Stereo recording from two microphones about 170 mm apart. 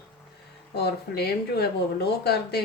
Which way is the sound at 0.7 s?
70° left (ahead or behind).